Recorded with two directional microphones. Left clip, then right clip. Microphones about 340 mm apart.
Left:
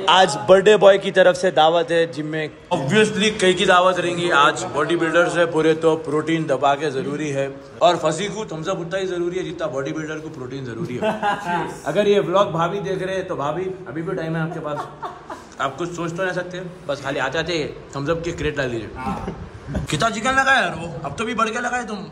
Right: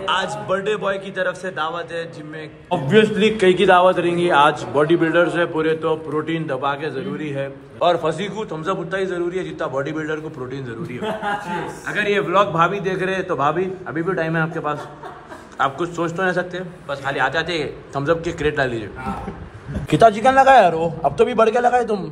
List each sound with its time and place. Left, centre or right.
0.0 s a man's voice: centre
2.7 s a man's voice: centre
11.4 s a man's voice: centre
19.9 s a man's voice: centre